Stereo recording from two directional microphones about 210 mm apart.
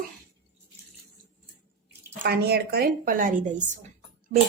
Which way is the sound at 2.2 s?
50° right (ahead or behind).